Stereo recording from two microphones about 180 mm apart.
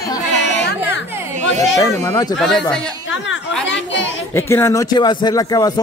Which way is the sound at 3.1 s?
90° left.